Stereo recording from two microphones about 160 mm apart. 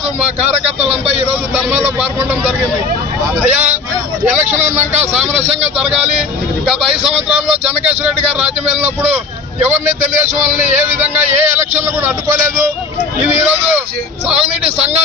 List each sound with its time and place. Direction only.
0.8 s speech: 5° right (ahead or behind)
5.7 s a man's voice: 5° right (ahead or behind)
10.6 s speech: 45° right (ahead or behind)
12.0 s speech: 15° right (ahead or behind)
14.6 s a man's voice: 40° right (ahead or behind)